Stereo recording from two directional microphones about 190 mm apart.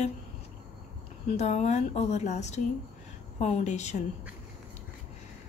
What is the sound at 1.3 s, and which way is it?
Speech, 35° left (ahead or behind).